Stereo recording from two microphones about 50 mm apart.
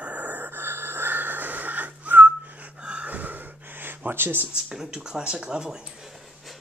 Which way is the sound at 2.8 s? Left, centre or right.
Right.